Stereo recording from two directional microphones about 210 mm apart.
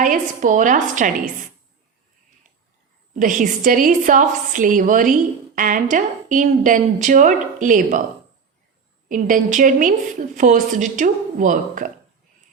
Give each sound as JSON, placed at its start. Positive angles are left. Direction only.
{"t": 0.0, "sound": "a woman's voice", "side_deg": -40}
{"t": 3.2, "sound": "a woman's voice", "side_deg": -40}
{"t": 9.0, "sound": "a woman's voice", "side_deg": -40}